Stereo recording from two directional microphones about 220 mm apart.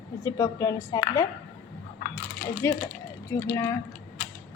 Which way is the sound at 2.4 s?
35° left (ahead or behind).